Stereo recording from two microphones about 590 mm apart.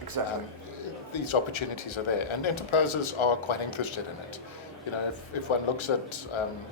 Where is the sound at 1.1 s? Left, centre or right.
Left.